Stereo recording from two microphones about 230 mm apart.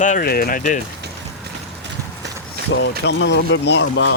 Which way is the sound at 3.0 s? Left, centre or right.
Left.